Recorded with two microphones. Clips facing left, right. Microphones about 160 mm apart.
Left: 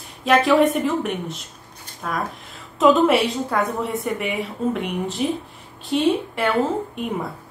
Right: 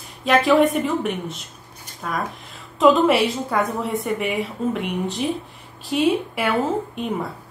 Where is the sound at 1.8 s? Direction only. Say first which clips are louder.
Even; centre (ahead or behind).